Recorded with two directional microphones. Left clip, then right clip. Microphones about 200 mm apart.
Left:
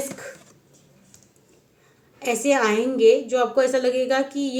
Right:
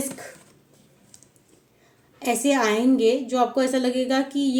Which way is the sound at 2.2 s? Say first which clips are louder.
Left 1 dB; 50° right (ahead or behind).